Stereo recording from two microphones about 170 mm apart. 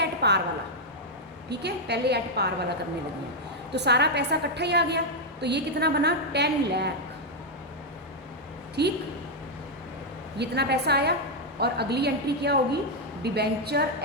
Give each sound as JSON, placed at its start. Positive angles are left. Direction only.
{"t": 0.0, "sound": "a sound", "side_deg": -80}
{"t": 1.5, "sound": "a woman's voice", "side_deg": -75}
{"t": 8.8, "sound": "a woman's voice", "side_deg": -75}
{"t": 10.3, "sound": "a woman's voice", "side_deg": -75}